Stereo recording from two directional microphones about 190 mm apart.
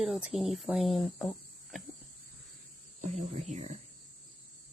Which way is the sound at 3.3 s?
35° right (ahead or behind).